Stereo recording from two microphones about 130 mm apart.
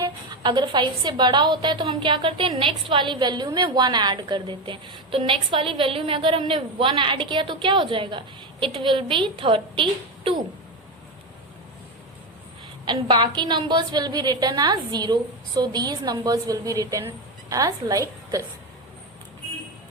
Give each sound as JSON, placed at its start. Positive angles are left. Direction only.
{"t": 0.0, "sound": "a woman's voice", "side_deg": -35}
{"t": 12.8, "sound": "a woman's voice", "side_deg": -35}